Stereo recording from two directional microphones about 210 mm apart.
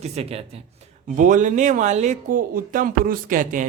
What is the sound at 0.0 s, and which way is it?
Speech, 30° right (ahead or behind).